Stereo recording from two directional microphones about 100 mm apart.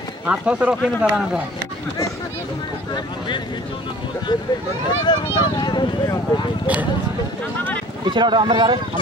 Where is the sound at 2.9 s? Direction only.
50° left (ahead or behind).